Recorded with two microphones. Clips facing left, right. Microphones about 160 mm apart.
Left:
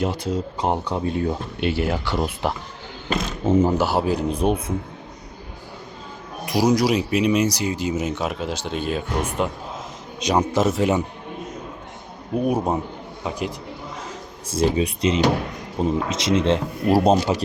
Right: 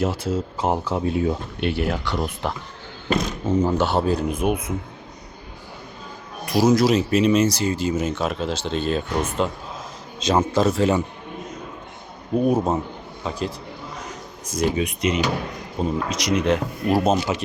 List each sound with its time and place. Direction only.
0.0 s speech: centre (ahead or behind)
3.6 s speech: 10° left (ahead or behind)
4.3 s speech: 30° left (ahead or behind)
6.4 s speech: 15° left (ahead or behind)
12.5 s speech: 10° left (ahead or behind)
14.4 s speech: 30° left (ahead or behind)